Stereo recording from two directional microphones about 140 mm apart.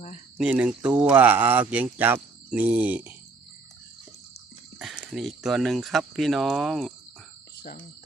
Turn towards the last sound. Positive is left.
turn(degrees=0)  # may be behind; listen again after turning